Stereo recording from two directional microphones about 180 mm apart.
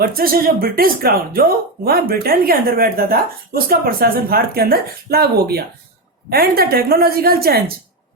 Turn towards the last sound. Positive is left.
turn(degrees=-60)  # may be behind; listen again after turning